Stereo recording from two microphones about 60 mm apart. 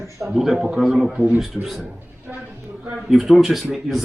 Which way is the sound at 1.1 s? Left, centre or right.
Right.